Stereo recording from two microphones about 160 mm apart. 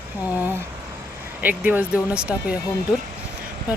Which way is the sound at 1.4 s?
10° right (ahead or behind).